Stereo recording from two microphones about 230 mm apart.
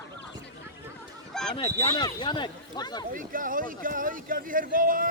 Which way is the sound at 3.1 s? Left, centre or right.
Right.